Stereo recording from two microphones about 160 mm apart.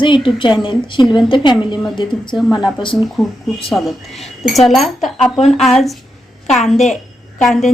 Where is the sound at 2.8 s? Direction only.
30° left (ahead or behind).